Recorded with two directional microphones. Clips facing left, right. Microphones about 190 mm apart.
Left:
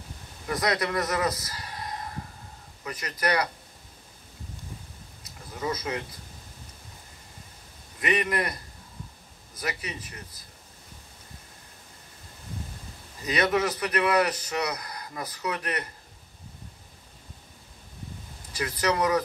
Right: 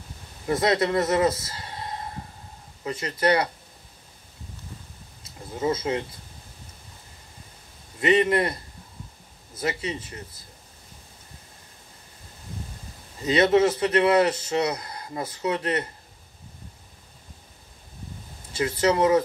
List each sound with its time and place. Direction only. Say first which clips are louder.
0.5 s a man's voice: right 5 dB; 25° right (ahead or behind)
5.2 s speech: right 6 dB; 25° right (ahead or behind)
8.0 s a man's voice: right 7 dB; 25° right (ahead or behind)
13.2 s a man's voice: right 6 dB; 25° right (ahead or behind)
18.5 s a man's voice: right 5 dB; 25° right (ahead or behind)